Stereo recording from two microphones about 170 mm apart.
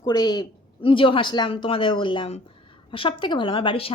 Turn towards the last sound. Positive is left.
turn(degrees=30)  # may be behind; listen again after turning